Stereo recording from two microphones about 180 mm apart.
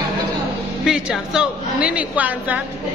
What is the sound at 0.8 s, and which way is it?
A woman's voice, centre (ahead or behind).